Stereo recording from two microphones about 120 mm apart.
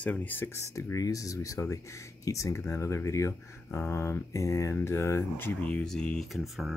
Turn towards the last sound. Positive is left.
turn(degrees=0)  # may be behind; listen again after turning